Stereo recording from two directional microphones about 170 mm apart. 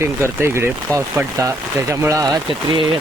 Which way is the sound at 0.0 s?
15° right (ahead or behind).